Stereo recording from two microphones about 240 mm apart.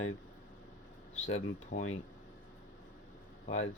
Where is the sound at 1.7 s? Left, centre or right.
Left.